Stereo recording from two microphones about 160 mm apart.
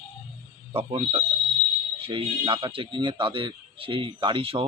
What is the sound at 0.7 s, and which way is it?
Speech, 35° right (ahead or behind).